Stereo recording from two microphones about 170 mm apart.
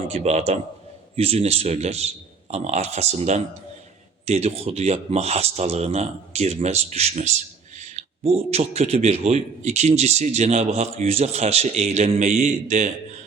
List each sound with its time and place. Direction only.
0.1 s a man's voice: 40° right (ahead or behind)